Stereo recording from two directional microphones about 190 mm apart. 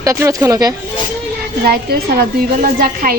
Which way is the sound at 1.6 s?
55° right (ahead or behind).